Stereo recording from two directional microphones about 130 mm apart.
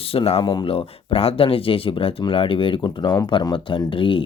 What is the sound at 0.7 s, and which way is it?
Speech, 45° left (ahead or behind).